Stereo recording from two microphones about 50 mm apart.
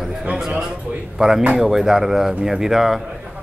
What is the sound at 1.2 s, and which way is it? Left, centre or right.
Speech, centre.